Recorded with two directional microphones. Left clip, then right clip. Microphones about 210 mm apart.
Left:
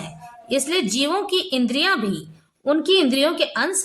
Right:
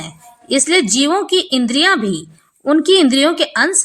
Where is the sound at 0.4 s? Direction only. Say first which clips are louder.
Right 7 dB; 20° right (ahead or behind).